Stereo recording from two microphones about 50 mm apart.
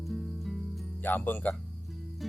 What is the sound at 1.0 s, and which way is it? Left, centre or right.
Speech, left.